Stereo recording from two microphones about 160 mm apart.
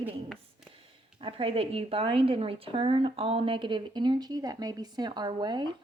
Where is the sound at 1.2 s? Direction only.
35° right (ahead or behind).